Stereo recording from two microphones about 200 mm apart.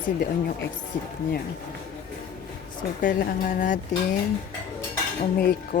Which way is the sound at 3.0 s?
40° left (ahead or behind).